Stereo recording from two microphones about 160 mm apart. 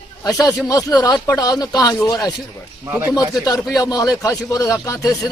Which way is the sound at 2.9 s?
10° right (ahead or behind).